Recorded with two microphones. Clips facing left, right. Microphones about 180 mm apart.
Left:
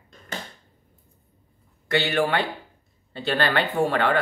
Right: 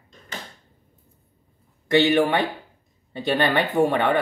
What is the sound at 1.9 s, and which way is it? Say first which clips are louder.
Speech: right 5 dB; 20° right (ahead or behind).